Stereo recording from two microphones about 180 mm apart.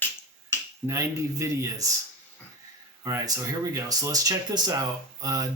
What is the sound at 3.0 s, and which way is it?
Speech, 15° right (ahead or behind).